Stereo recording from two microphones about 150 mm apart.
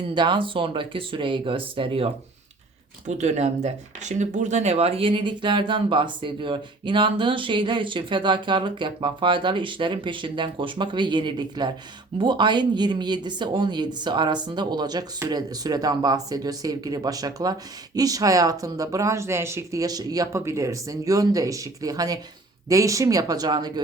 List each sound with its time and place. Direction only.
0.1 s speech: 30° right (ahead or behind)
3.1 s speech: 50° right (ahead or behind); by 23.8 s 25° right (ahead or behind)